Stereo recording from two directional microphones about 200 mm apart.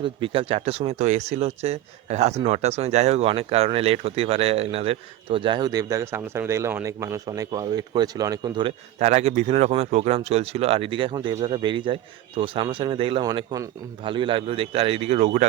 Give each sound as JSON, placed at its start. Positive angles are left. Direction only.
{"t": 0.0, "sound": "speech", "side_deg": -25}